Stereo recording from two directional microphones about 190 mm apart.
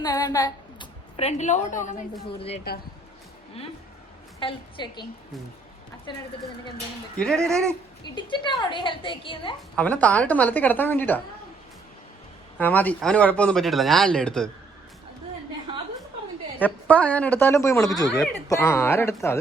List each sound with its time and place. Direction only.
0.0 s a woman's voice: 20° left (ahead or behind); by 2.0 s 40° left (ahead or behind)
4.4 s a woman's voice: 25° left (ahead or behind)
7.4 s speech: centre (ahead or behind)
8.0 s a woman's voice: 25° left (ahead or behind)
9.7 s a woman's voice: 10° left (ahead or behind)
12.5 s speech: 10° left (ahead or behind)
16.6 s a woman's voice: 10° left (ahead or behind)